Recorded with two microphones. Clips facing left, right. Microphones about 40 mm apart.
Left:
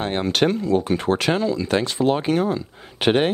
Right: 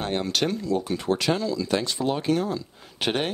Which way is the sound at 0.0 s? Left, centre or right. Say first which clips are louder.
Left 5 dB; left.